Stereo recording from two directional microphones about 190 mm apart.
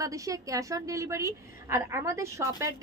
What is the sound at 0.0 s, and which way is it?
A woman's voice, 15° right (ahead or behind).